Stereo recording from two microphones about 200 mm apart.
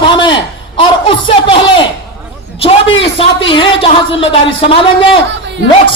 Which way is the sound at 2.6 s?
25° left (ahead or behind).